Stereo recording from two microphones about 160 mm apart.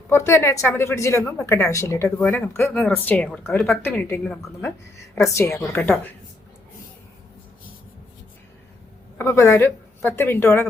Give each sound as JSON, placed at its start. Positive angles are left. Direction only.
{"t": 0.1, "sound": "speech", "side_deg": 15}
{"t": 9.1, "sound": "speech", "side_deg": 15}